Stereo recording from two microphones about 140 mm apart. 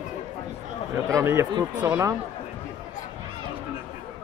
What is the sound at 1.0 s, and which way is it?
A man's voice, 20° right (ahead or behind).